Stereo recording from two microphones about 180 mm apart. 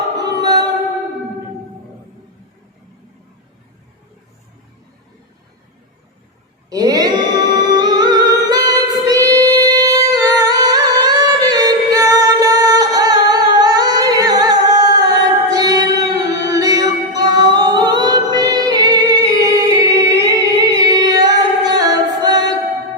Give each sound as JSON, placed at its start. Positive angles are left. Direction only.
{"t": 0.2, "sound": "music", "side_deg": -20}
{"t": 6.7, "sound": "music", "side_deg": -20}